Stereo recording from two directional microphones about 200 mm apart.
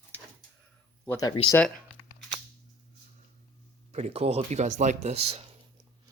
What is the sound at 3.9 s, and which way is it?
Speech, 30° right (ahead or behind).